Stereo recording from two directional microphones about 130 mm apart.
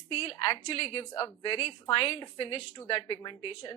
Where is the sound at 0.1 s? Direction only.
45° left (ahead or behind).